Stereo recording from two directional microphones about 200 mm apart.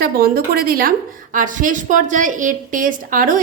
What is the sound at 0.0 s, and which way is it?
A woman's voice, 50° right (ahead or behind).